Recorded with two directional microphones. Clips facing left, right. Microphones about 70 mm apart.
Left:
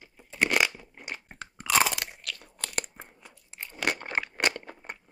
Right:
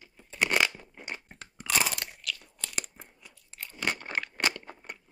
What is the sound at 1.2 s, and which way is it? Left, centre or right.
Crunch, left.